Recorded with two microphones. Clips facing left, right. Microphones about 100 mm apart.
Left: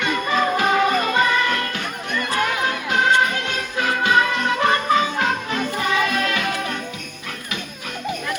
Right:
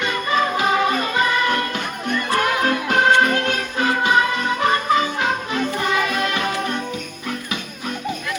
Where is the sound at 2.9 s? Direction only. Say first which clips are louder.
Right 2 dB; 50° right (ahead or behind).